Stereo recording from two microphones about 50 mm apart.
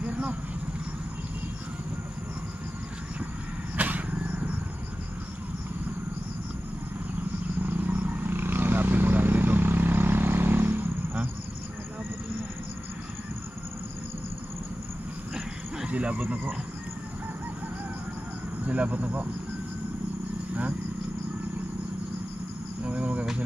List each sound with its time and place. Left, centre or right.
0.0 s a sound: right
3.7 s vehicle: right
7.6 s wild animals: right
15.9 s a sound: right
18.7 s insect: right
22.8 s cricket: right